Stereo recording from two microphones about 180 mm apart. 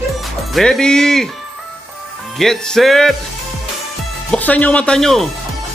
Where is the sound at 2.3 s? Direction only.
Centre (ahead or behind).